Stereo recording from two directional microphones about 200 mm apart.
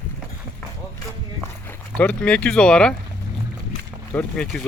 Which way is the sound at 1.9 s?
5° left (ahead or behind).